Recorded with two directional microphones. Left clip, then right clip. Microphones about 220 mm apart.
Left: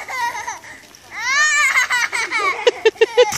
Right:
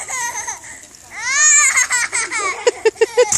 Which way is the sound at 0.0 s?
5° right (ahead or behind).